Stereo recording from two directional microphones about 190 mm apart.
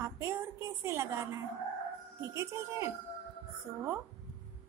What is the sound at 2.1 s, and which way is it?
Speech, 15° right (ahead or behind).